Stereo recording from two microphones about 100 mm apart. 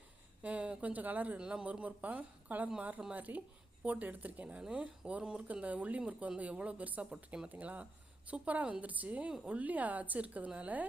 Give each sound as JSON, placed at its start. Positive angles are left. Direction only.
{"t": 0.4, "sound": "speech", "side_deg": -10}